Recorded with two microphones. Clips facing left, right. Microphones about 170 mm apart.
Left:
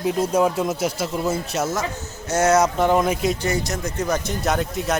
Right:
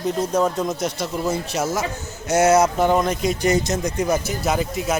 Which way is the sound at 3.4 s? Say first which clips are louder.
Right 4 dB; 20° right (ahead or behind).